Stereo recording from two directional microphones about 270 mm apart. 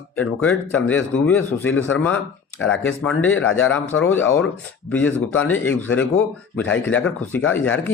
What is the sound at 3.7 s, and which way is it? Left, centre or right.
Speech, centre.